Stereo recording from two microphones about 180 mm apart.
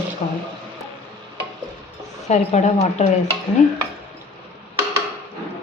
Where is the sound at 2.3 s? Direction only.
40° left (ahead or behind).